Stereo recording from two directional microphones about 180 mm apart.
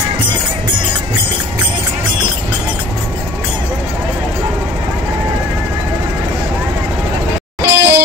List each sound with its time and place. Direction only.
7.6 s music: 65° right (ahead or behind)